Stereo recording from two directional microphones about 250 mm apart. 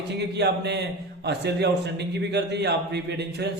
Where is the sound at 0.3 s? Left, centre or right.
Right.